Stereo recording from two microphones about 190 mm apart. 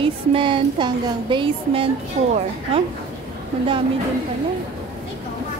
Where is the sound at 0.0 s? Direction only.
25° right (ahead or behind).